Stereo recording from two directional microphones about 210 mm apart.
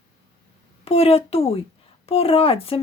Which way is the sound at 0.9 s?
30° left (ahead or behind).